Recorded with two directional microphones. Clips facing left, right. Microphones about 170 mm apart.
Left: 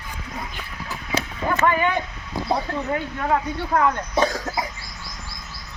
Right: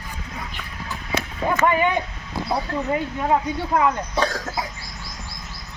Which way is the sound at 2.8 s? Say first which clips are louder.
Right 3 dB; 15° right (ahead or behind).